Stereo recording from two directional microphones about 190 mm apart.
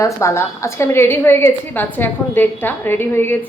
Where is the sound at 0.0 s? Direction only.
15° left (ahead or behind).